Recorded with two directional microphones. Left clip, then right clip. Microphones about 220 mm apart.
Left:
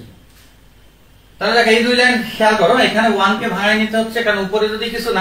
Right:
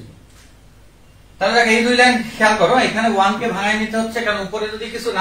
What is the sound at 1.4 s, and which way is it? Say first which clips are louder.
Speech: left 2 dB; 15° left (ahead or behind).